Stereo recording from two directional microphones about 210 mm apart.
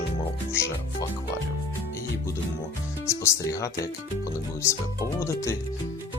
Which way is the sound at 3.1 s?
15° left (ahead or behind).